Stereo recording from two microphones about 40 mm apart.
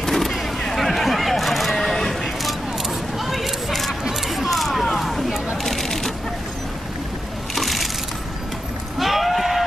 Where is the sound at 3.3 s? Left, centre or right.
Centre.